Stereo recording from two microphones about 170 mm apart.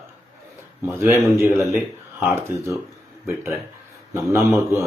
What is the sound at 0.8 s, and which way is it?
Speech, centre (ahead or behind).